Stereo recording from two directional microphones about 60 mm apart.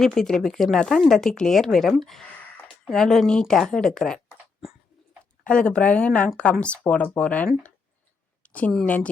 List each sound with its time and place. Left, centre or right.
0.0 s a woman's voice: centre
5.4 s speech: centre